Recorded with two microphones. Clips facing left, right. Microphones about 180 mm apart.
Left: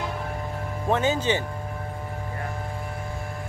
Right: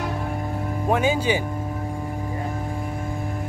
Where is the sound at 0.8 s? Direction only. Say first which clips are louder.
Right 2 dB; 10° right (ahead or behind).